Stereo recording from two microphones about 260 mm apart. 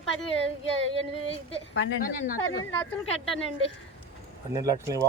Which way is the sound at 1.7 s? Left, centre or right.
Left.